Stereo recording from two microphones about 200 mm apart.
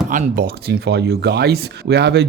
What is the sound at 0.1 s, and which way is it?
Speech, 45° right (ahead or behind).